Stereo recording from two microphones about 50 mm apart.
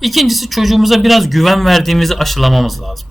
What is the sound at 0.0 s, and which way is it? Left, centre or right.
A man's voice, centre.